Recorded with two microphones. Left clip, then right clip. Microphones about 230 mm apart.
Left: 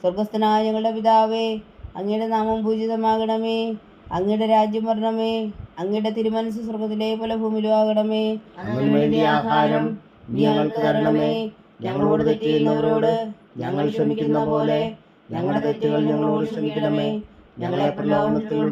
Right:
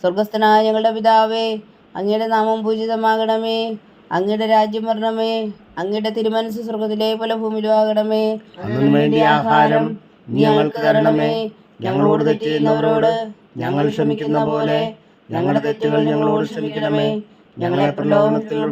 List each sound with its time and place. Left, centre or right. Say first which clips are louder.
0.0 s mantra: right 5 dB; right